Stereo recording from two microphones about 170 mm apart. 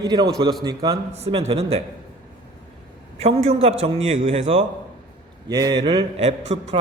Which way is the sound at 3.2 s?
35° right (ahead or behind).